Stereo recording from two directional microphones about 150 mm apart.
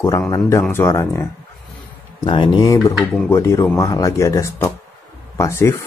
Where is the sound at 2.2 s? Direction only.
35° left (ahead or behind).